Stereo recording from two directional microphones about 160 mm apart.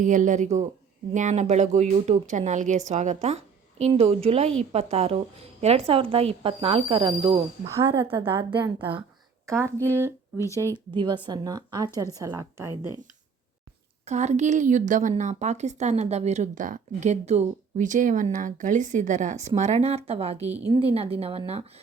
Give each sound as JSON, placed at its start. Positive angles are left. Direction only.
{"t": 0.0, "sound": "speech", "side_deg": -50}
{"t": 7.8, "sound": "a woman's voice", "side_deg": -15}
{"t": 10.9, "sound": "a woman's voice", "side_deg": -30}
{"t": 14.0, "sound": "speech", "side_deg": -45}